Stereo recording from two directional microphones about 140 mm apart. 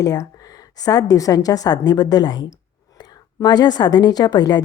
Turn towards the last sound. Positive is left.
turn(degrees=30)  # may be behind; listen again after turning